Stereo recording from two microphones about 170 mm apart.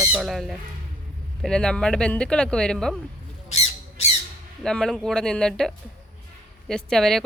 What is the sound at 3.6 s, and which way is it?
Squawk, 40° left (ahead or behind).